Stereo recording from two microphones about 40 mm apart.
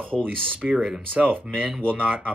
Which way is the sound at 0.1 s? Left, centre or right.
Centre.